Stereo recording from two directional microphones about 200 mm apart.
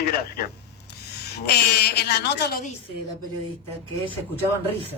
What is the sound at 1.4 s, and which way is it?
Speech, 55° left (ahead or behind).